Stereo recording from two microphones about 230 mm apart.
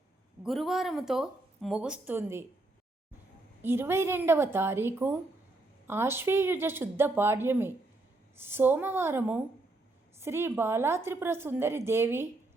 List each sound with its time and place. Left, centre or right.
0.4 s speech: centre
3.6 s a woman's voice: centre